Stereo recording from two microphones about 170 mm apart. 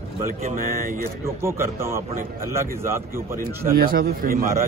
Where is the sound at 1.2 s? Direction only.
15° right (ahead or behind).